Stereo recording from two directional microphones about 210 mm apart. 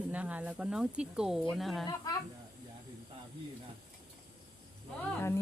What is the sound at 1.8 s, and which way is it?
Speech, 20° left (ahead or behind).